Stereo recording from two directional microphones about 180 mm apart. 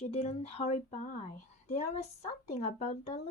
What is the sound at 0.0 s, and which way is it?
Speech, 35° left (ahead or behind).